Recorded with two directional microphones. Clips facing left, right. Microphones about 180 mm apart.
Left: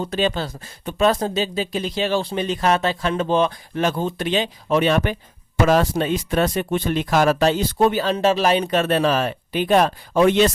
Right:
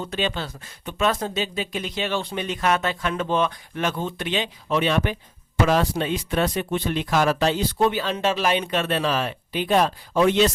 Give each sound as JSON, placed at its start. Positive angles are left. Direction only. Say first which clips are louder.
{"t": 0.0, "sound": "speech", "louder": "left 5 dB", "side_deg": 40}